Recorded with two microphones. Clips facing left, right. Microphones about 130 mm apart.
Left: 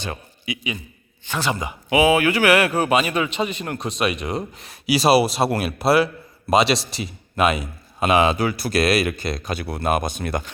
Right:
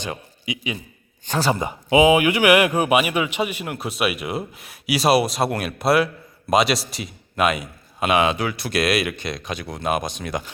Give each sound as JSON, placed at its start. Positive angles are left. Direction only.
{"t": 0.0, "sound": "a man's voice", "side_deg": -20}
{"t": 1.3, "sound": "a man's voice", "side_deg": -40}